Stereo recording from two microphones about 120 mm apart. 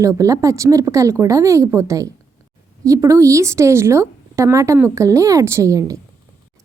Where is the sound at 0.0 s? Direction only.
25° right (ahead or behind).